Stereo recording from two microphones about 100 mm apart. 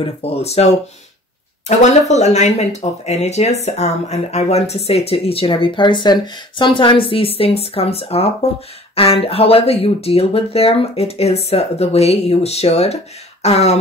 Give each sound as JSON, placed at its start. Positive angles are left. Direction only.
{"t": 0.0, "sound": "speech", "side_deg": 90}
{"t": 2.1, "sound": "speech", "side_deg": 90}
{"t": 8.9, "sound": "speech", "side_deg": 70}